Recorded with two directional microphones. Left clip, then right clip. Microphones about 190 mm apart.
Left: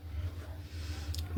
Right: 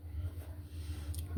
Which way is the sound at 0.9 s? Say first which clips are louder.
Left 7 dB; 25° right (ahead or behind).